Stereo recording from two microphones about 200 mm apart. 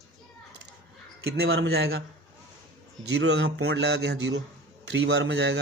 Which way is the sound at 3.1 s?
60° right (ahead or behind).